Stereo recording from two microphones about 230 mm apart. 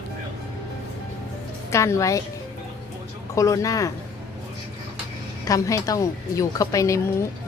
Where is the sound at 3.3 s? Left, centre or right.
Centre.